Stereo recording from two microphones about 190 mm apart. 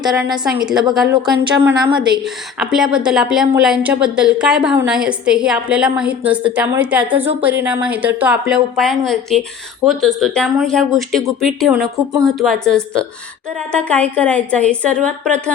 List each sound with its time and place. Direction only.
0.0 s a woman's voice: 5° right (ahead or behind)